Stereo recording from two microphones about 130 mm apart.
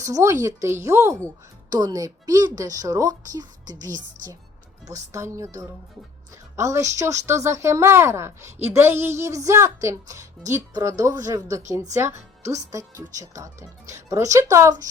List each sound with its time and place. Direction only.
0.0 s speech: 25° right (ahead or behind)
6.6 s speech: 25° right (ahead or behind)